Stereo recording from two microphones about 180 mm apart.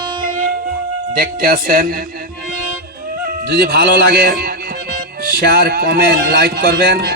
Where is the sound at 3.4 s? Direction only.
60° right (ahead or behind).